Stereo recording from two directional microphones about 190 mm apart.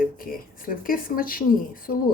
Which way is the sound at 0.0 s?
50° left (ahead or behind).